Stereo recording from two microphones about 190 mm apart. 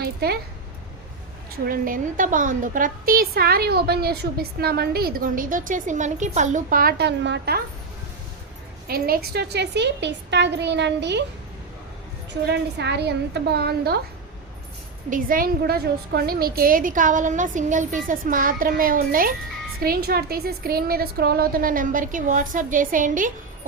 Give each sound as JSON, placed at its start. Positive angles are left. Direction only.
{"t": 0.0, "sound": "speech", "side_deg": -55}
{"t": 1.6, "sound": "a woman's voice", "side_deg": -45}
{"t": 8.9, "sound": "a woman's voice", "side_deg": -50}
{"t": 12.3, "sound": "a woman's voice", "side_deg": -60}
{"t": 15.1, "sound": "a woman's voice", "side_deg": -50}